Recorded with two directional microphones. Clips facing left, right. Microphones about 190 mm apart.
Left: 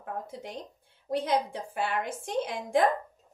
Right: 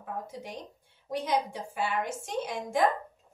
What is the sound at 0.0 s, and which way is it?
A woman's voice, 55° left (ahead or behind).